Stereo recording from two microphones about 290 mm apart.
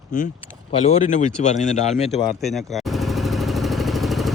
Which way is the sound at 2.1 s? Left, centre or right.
Centre.